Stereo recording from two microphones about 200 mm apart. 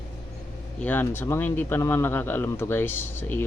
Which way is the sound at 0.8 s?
10° left (ahead or behind).